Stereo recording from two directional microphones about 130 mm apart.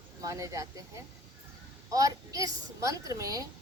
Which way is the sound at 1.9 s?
25° right (ahead or behind).